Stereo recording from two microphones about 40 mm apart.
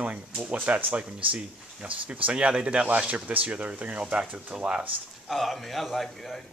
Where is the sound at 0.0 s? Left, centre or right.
Right.